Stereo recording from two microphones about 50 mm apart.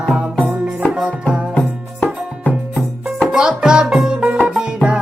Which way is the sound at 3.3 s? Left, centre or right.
Centre.